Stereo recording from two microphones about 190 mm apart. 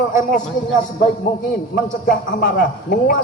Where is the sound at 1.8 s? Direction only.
50° left (ahead or behind).